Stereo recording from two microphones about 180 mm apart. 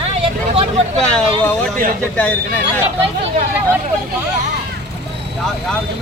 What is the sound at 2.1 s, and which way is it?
Speech, 10° left (ahead or behind).